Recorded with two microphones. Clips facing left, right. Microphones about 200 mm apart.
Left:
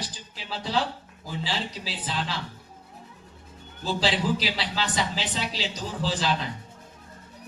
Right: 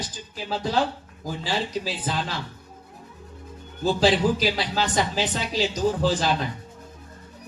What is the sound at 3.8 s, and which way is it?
A man's voice, 45° right (ahead or behind).